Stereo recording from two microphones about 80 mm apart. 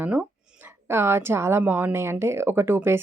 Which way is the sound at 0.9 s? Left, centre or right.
Right.